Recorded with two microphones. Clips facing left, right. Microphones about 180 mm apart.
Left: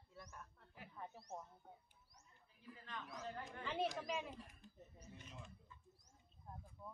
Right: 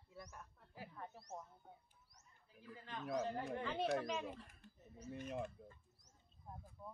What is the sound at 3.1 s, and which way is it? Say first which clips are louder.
Speech: right 12 dB; 75° right (ahead or behind).